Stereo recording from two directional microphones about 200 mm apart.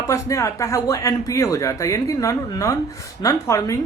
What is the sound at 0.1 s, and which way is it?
Speech, 15° left (ahead or behind).